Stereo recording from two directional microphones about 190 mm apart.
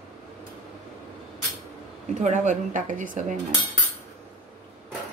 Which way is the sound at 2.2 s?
40° right (ahead or behind).